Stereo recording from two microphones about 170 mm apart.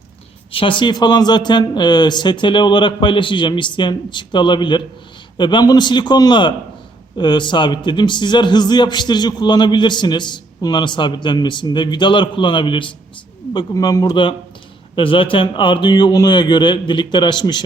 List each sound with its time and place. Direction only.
0.5 s a man's voice: 30° left (ahead or behind)